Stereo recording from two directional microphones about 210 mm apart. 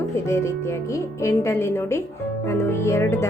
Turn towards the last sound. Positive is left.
turn(degrees=10)  # may be behind; listen again after turning